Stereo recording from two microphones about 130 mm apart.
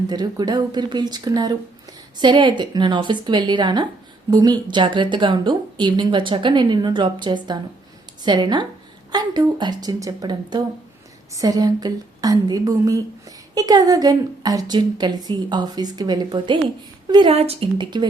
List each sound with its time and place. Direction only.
0.1 s a woman's voice: 30° right (ahead or behind)
17.3 s a woman's voice: 50° right (ahead or behind)